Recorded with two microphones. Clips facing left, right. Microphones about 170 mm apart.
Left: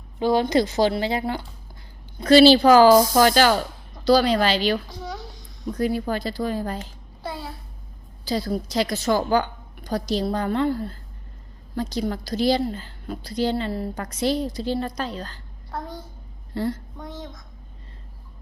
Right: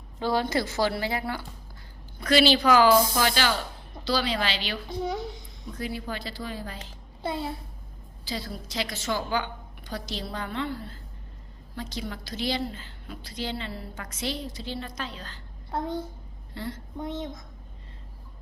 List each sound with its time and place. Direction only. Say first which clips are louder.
0.2 s a woman's voice: left 6 dB; 15° left (ahead or behind); by 4.8 s 40° left (ahead or behind)
4.9 s a sound: right 4 dB; 25° right (ahead or behind)
5.7 s speech: left 9 dB; 45° left (ahead or behind)
7.2 s a child's voice: right 2 dB; 25° right (ahead or behind)
8.2 s a woman's voice: left 10 dB; 40° left (ahead or behind)
16.5 s a woman's voice: left 10 dB; 40° left (ahead or behind)
17.0 s a child's voice: right 4 dB; 25° right (ahead or behind)